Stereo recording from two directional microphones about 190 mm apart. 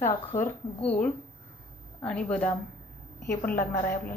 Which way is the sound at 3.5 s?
15° left (ahead or behind).